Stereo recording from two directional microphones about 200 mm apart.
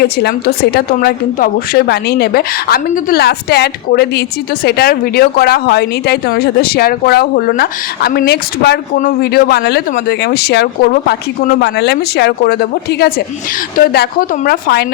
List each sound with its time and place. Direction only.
0.0 s a woman's voice: 55° left (ahead or behind)